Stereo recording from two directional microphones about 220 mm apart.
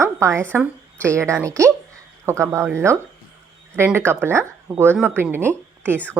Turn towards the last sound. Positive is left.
turn(degrees=-10)  # may be behind; listen again after turning